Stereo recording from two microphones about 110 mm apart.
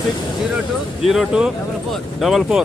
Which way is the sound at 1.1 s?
5° right (ahead or behind).